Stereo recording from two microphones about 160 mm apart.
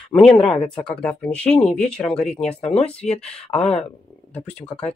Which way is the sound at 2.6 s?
40° left (ahead or behind).